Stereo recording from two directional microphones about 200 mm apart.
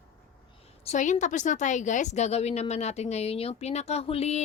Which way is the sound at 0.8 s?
40° left (ahead or behind).